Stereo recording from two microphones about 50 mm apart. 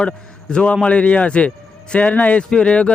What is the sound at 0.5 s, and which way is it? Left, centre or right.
Speech, centre.